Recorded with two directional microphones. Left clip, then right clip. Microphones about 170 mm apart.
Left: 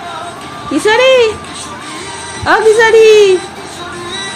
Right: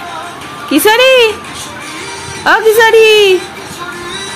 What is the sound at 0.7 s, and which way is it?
Speech, 25° right (ahead or behind).